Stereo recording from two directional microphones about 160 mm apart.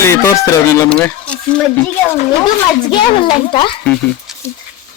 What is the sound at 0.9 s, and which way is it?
Speech, 5° left (ahead or behind).